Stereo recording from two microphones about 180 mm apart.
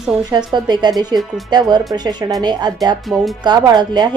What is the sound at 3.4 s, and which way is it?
Speech, 25° right (ahead or behind).